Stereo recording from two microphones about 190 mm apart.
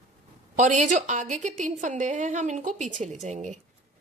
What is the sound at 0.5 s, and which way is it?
A woman's voice, 40° right (ahead or behind).